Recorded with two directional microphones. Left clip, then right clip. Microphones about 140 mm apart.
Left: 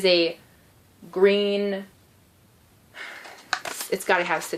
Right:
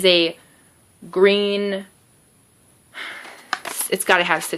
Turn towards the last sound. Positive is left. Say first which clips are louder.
# right 5 dB
turn(degrees=-50)  # may be behind; listen again after turning